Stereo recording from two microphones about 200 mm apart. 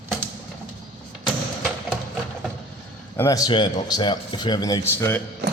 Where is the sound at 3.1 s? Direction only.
15° left (ahead or behind).